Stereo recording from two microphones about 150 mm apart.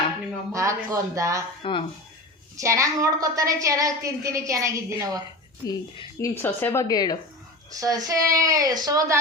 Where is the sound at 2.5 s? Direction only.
20° right (ahead or behind).